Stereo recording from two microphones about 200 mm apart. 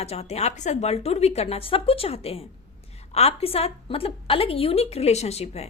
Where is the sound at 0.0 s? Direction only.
30° left (ahead or behind).